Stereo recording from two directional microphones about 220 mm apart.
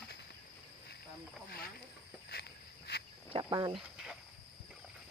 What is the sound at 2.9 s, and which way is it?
Cricket, 50° left (ahead or behind).